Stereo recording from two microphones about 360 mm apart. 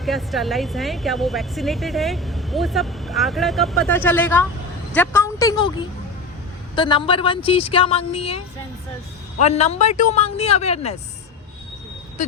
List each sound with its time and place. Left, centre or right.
0.0 s speech: centre
9.4 s speech: centre